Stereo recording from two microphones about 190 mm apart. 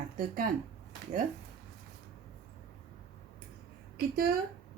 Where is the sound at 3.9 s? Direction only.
55° right (ahead or behind).